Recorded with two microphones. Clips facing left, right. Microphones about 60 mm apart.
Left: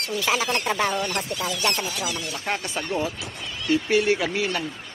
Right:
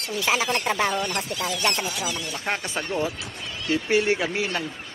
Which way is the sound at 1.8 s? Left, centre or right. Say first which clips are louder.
Even; centre.